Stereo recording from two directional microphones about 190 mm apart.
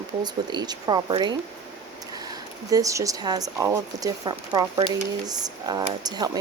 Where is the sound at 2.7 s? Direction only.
15° right (ahead or behind).